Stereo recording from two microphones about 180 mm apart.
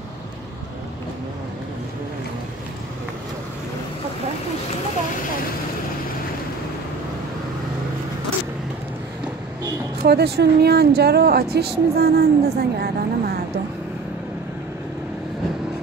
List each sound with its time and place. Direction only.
10.0 s speech: 65° right (ahead or behind)